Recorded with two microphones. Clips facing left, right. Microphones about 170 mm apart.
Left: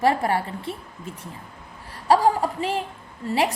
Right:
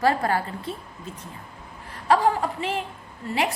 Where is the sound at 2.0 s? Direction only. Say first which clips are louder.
Left 2 dB; 35° left (ahead or behind).